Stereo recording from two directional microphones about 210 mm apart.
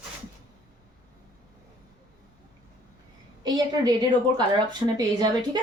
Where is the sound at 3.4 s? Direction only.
20° right (ahead or behind).